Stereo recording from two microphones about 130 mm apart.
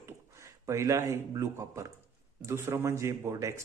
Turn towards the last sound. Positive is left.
turn(degrees=-25)  # may be behind; listen again after turning